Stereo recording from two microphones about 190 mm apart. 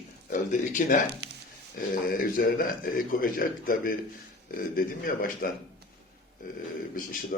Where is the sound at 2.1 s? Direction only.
50° left (ahead or behind).